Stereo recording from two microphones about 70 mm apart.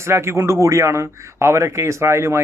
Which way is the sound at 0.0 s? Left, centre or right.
Right.